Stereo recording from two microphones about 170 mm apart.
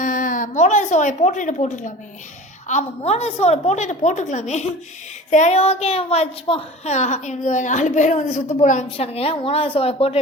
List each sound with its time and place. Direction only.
0.0 s a woman's voice: 50° left (ahead or behind); by 10.2 s 35° left (ahead or behind)